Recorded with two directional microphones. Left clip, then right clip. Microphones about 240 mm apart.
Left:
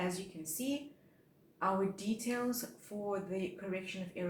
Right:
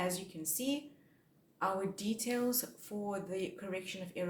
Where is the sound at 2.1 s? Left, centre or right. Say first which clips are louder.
Right 2 dB; right.